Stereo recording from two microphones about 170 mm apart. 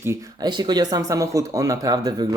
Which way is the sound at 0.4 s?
25° right (ahead or behind).